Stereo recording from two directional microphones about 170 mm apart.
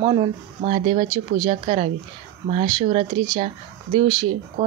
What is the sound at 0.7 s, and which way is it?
Speech, 40° right (ahead or behind).